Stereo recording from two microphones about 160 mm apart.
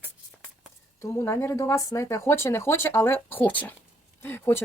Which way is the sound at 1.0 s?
15° left (ahead or behind).